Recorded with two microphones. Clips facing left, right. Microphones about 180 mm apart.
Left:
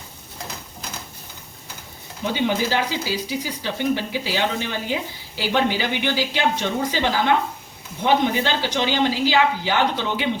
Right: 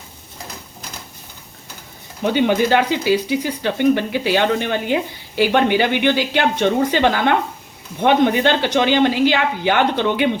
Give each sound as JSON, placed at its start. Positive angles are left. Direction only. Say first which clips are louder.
{"t": 2.3, "sound": "speech", "louder": "right 6 dB", "side_deg": -60}